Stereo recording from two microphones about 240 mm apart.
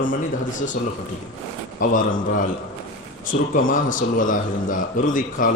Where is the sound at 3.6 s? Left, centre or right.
Left.